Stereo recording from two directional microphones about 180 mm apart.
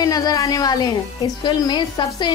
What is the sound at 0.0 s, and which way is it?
Speech, 20° left (ahead or behind).